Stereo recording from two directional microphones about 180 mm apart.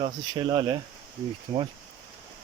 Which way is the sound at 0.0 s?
25° right (ahead or behind).